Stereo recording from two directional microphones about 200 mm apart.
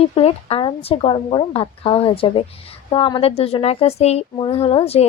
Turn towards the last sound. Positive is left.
turn(degrees=30)  # may be behind; listen again after turning